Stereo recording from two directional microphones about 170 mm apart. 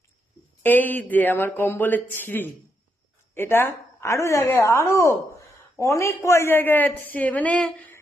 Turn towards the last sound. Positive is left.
turn(degrees=5)  # may be behind; listen again after turning